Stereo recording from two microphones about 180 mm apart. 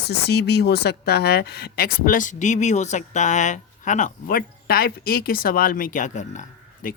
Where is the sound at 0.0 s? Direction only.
65° left (ahead or behind).